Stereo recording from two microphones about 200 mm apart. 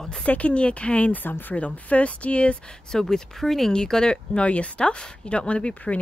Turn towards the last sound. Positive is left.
turn(degrees=5)  # may be behind; listen again after turning